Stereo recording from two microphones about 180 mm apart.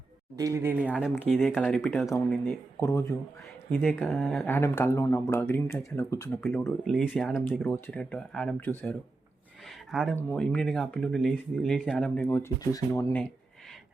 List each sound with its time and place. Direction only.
0.3 s speech: 20° right (ahead or behind); by 1.9 s centre (ahead or behind)
2.5 s speech: 15° left (ahead or behind)
3.7 s speech: centre (ahead or behind); by 6.4 s 15° left (ahead or behind)
6.4 s speech: centre (ahead or behind)
9.6 s a sound: centre (ahead or behind)
10.2 s speech: 10° left (ahead or behind)